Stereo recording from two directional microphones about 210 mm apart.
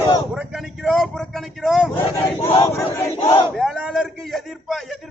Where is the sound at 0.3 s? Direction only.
Centre (ahead or behind).